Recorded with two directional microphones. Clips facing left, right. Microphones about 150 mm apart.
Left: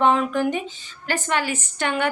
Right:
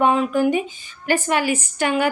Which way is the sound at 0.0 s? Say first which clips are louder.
Right 2 dB; 5° right (ahead or behind).